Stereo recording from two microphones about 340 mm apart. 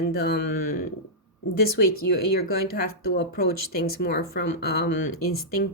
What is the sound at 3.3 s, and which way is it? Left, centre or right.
Speech, left.